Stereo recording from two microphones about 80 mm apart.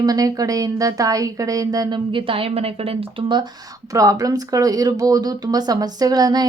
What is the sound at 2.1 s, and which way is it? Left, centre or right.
A woman's voice, right.